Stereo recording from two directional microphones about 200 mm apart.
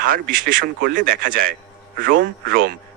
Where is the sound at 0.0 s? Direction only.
45° right (ahead or behind).